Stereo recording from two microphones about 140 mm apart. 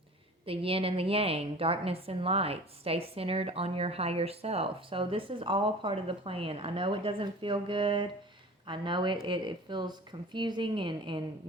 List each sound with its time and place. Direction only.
0.4 s a woman's voice: 40° right (ahead or behind)